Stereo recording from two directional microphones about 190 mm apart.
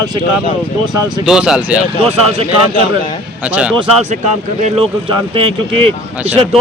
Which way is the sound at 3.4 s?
5° right (ahead or behind).